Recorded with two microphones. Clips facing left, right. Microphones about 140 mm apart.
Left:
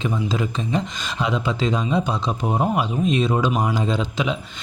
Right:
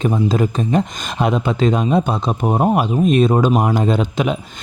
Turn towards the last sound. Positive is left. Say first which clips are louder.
# right 5 dB
turn(degrees=-55)  # may be behind; listen again after turning